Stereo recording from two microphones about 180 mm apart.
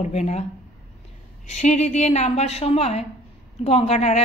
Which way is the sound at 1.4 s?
40° left (ahead or behind).